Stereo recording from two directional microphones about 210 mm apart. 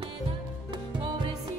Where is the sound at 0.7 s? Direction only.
25° right (ahead or behind).